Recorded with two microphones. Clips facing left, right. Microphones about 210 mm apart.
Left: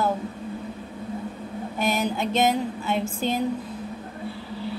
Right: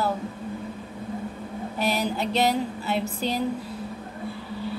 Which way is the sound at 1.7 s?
35° right (ahead or behind).